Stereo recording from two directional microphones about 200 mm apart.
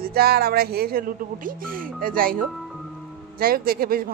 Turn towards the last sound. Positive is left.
turn(degrees=-50)  # may be behind; listen again after turning